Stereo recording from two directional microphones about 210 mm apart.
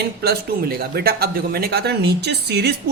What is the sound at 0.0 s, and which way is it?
Speech, 50° right (ahead or behind).